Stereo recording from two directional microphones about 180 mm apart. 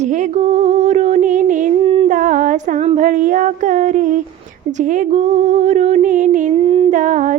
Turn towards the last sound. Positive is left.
turn(degrees=-45)  # may be behind; listen again after turning